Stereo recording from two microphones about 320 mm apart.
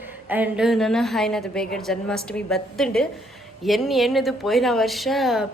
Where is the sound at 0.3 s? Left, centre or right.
Centre.